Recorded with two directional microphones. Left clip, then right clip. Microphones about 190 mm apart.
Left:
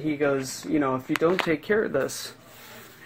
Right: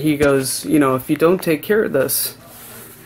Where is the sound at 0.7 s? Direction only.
25° right (ahead or behind).